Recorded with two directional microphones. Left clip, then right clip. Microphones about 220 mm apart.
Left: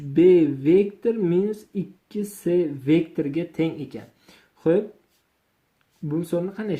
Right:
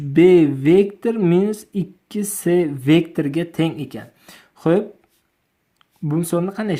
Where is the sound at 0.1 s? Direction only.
30° right (ahead or behind).